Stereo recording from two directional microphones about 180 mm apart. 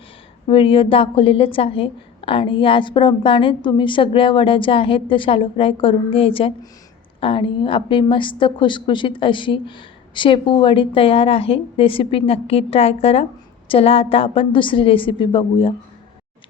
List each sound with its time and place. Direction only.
0.4 s a woman's voice: 30° left (ahead or behind)